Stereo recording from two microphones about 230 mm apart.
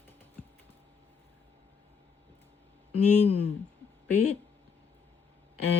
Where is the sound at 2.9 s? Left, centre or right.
Left.